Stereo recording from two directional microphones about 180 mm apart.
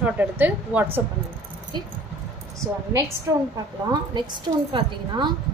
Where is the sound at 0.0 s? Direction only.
10° right (ahead or behind).